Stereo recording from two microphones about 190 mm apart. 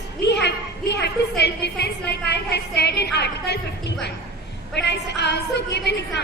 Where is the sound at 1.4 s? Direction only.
60° left (ahead or behind).